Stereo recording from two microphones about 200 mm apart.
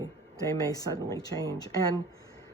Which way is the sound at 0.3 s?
15° left (ahead or behind).